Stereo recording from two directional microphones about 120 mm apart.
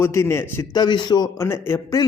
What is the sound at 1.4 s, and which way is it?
Speech, 20° left (ahead or behind).